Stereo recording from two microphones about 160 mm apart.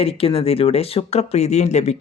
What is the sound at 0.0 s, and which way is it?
Speech, 35° left (ahead or behind).